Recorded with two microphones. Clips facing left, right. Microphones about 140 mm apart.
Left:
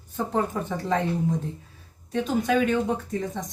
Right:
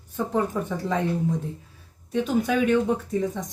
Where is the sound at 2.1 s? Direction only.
10° right (ahead or behind).